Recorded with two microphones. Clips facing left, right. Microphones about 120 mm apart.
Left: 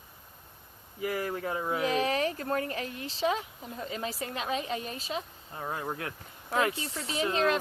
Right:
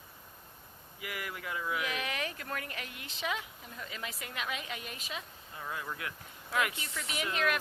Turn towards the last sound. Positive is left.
turn(degrees=30)  # may be behind; listen again after turning